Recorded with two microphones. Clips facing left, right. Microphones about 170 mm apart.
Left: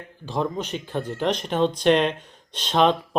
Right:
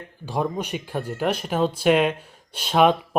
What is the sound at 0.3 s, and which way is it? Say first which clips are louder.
Speech: right 1 dB; 10° right (ahead or behind).